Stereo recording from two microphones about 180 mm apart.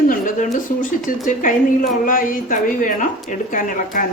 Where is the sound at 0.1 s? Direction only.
45° left (ahead or behind).